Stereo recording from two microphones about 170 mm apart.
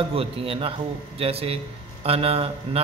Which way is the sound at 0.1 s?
35° right (ahead or behind).